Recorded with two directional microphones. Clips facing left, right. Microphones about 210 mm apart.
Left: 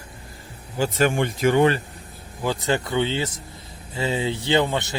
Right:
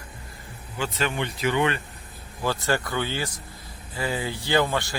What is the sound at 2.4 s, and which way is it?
Speech, 20° left (ahead or behind).